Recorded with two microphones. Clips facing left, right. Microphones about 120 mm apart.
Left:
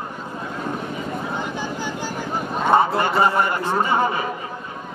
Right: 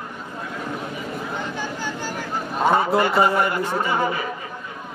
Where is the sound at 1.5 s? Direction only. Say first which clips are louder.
Left 1 dB; 15° left (ahead or behind).